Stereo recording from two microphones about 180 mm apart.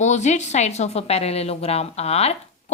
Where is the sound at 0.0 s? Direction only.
40° left (ahead or behind).